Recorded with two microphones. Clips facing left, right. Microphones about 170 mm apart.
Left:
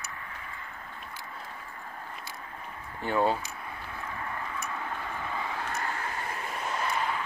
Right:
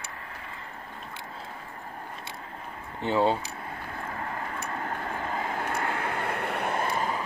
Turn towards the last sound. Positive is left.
turn(degrees=-40)  # may be behind; listen again after turning